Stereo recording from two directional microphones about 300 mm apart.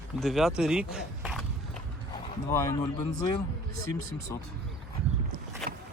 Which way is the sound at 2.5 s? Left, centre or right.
Centre.